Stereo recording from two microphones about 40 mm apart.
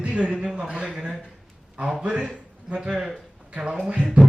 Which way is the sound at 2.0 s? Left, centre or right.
Right.